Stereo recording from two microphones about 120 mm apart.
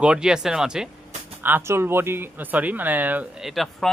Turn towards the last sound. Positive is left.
turn(degrees=0)  # may be behind; listen again after turning